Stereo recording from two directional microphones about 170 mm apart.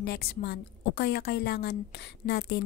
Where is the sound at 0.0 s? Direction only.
70° left (ahead or behind).